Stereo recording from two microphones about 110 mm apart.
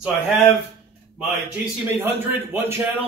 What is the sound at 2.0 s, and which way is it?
Speech, 20° right (ahead or behind).